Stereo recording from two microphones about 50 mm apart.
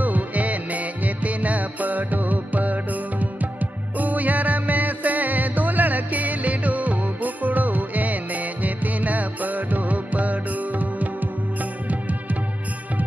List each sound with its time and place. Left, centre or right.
0.0 s music: right